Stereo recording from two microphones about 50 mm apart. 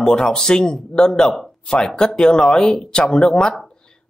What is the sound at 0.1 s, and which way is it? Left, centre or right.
A man's voice, centre.